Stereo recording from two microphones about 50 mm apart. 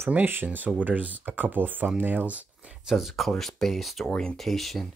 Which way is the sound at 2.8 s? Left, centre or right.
Centre.